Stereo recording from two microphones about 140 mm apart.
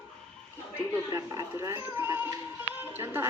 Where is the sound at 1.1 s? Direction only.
20° right (ahead or behind).